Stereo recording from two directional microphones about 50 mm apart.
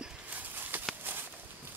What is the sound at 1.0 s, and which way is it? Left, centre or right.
Walk, right.